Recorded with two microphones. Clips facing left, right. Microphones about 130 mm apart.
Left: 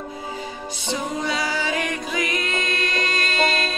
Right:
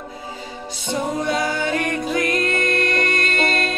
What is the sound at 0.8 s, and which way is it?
Music, 55° right (ahead or behind).